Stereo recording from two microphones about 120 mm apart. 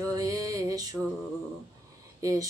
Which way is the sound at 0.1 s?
30° right (ahead or behind).